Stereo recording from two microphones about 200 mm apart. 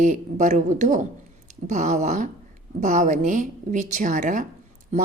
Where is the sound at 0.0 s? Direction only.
40° right (ahead or behind).